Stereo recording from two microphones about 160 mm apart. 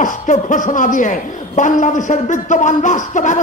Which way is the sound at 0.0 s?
55° left (ahead or behind).